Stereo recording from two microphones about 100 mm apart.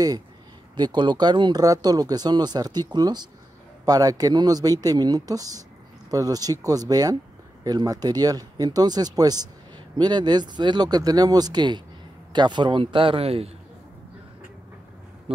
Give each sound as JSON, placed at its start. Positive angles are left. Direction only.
{"t": 0.7, "sound": "a man's voice", "side_deg": -50}
{"t": 15.3, "sound": "speech", "side_deg": -70}